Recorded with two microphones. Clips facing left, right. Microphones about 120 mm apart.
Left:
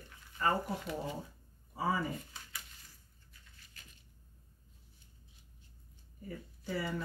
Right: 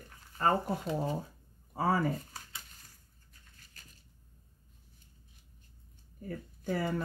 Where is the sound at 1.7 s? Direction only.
55° right (ahead or behind).